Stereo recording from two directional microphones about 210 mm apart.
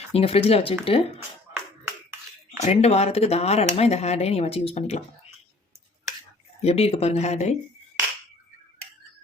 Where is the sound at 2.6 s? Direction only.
30° left (ahead or behind).